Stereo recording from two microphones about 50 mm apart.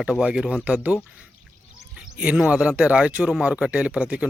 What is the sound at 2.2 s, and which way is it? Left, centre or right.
Speech, right.